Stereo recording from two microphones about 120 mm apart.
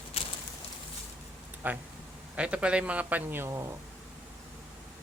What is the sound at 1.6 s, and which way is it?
A man's voice, 15° right (ahead or behind).